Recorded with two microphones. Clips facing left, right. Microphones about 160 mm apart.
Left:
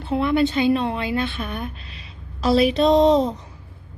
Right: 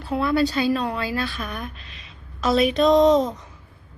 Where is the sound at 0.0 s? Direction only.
25° left (ahead or behind).